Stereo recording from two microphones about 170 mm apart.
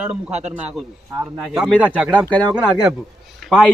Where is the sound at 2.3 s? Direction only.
5° left (ahead or behind).